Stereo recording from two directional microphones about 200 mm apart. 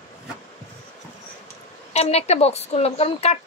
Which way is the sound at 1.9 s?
30° left (ahead or behind).